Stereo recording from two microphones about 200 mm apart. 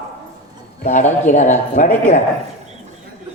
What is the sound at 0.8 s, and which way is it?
Speech, 35° left (ahead or behind).